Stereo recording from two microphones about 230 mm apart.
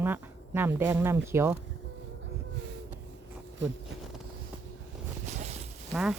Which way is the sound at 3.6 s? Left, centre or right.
Right.